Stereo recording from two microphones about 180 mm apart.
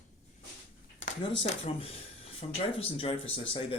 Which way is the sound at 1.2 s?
35° left (ahead or behind).